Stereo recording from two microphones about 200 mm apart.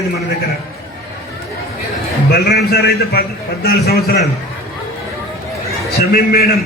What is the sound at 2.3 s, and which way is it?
A man's voice, 50° left (ahead or behind).